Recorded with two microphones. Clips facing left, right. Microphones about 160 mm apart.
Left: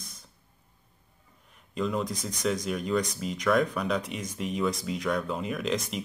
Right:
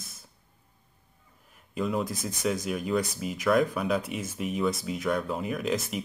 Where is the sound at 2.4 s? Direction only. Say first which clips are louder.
Even; 5° right (ahead or behind).